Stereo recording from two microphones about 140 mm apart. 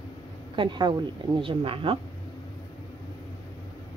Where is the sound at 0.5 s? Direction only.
35° right (ahead or behind).